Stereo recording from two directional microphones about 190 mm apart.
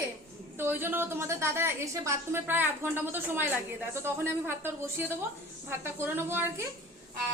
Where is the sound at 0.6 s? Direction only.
10° right (ahead or behind).